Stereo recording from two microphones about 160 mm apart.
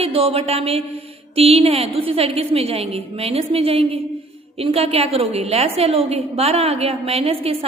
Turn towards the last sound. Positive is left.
turn(degrees=-35)  # may be behind; listen again after turning